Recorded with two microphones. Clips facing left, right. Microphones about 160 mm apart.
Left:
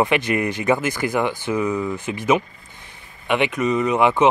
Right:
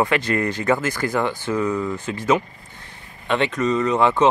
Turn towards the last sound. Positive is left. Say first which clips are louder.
# left 1 dB
turn(degrees=15)  # may be behind; listen again after turning